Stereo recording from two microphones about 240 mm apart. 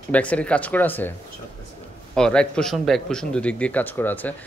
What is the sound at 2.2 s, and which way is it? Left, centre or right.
Speech, centre.